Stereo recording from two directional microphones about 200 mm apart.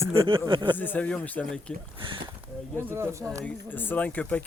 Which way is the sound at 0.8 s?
10° left (ahead or behind).